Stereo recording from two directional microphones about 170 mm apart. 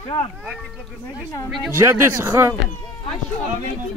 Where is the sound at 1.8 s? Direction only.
15° right (ahead or behind).